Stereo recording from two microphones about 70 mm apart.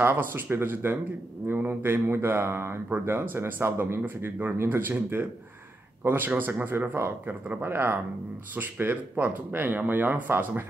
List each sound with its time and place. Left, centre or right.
0.0 s speech: right